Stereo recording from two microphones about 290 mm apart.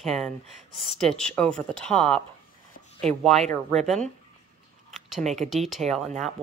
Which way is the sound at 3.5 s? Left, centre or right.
Centre.